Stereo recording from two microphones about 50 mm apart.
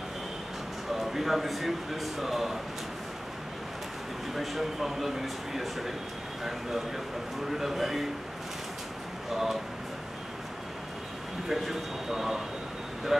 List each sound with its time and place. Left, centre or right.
0.9 s speech: centre
4.4 s speech: centre
7.4 s speech: centre
9.3 s speech: centre
11.4 s speech: centre